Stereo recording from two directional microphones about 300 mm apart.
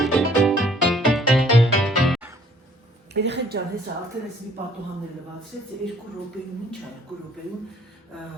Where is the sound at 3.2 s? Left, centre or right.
Right.